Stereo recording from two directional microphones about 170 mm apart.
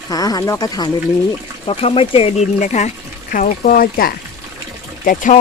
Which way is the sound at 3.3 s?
55° left (ahead or behind).